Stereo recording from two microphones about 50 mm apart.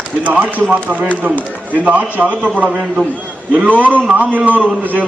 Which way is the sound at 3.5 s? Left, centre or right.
Right.